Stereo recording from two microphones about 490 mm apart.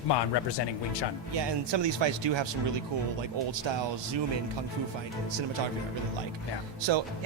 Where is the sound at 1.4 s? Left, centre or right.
Right.